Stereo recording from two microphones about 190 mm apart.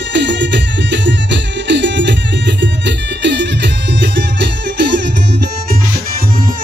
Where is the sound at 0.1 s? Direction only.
70° right (ahead or behind).